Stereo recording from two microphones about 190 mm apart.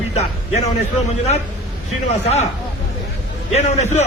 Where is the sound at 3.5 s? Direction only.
35° left (ahead or behind).